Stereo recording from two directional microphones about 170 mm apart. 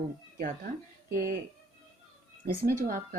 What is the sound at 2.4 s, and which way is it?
Speech, 60° right (ahead or behind).